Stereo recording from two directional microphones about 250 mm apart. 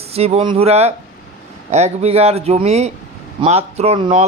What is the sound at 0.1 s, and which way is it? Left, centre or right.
A man's voice, right.